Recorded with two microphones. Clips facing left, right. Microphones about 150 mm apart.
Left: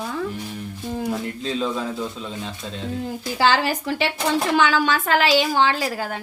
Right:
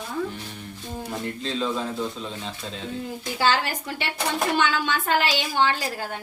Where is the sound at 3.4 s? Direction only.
90° left.